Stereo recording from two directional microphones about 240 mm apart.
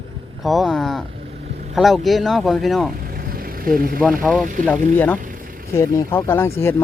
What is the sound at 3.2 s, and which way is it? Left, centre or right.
Vehicle, right.